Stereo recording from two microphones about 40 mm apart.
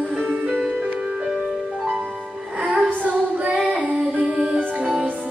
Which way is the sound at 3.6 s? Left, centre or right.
Right.